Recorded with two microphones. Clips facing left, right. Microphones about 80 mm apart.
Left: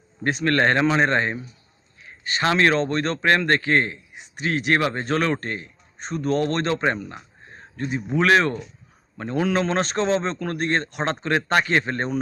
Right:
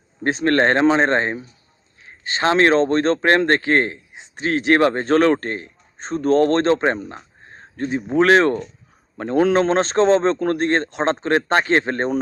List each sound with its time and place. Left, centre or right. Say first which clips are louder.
0.2 s a man's voice: right 3 dB; right